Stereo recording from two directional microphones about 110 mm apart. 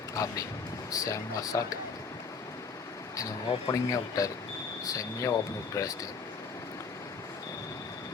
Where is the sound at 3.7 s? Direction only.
30° left (ahead or behind).